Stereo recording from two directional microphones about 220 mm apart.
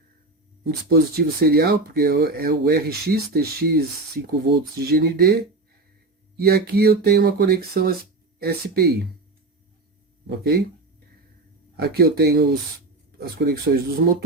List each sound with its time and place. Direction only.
0.6 s speech: 45° right (ahead or behind)
6.4 s speech: 45° right (ahead or behind)
10.2 s speech: 45° right (ahead or behind)
11.8 s speech: 45° right (ahead or behind)